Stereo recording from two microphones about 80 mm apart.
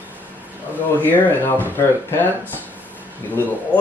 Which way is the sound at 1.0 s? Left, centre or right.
Left.